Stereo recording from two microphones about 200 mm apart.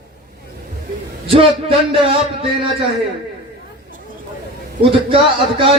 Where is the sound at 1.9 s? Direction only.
25° right (ahead or behind).